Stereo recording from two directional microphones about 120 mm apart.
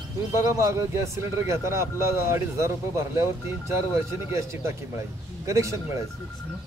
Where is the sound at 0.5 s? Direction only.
25° right (ahead or behind).